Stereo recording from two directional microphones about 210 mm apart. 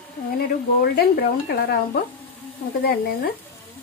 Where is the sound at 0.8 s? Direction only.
45° left (ahead or behind).